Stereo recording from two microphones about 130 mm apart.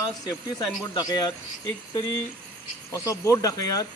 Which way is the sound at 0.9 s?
30° left (ahead or behind).